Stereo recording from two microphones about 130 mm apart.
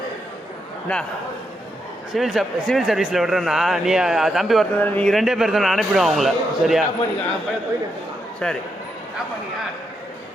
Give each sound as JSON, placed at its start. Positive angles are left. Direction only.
{"t": 0.9, "sound": "a man's voice", "side_deg": 10}
{"t": 2.1, "sound": "speech", "side_deg": 0}
{"t": 4.8, "sound": "speech", "side_deg": 10}
{"t": 8.4, "sound": "a man's voice", "side_deg": 5}